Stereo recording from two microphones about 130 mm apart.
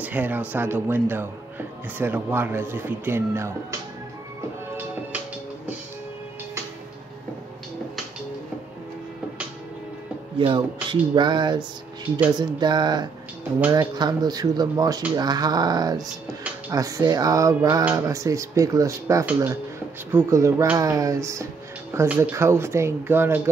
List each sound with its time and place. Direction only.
0.0 s speech: 15° right (ahead or behind)
10.4 s speech: 40° right (ahead or behind); by 21.5 s 25° right (ahead or behind)
21.9 s speech: 15° right (ahead or behind)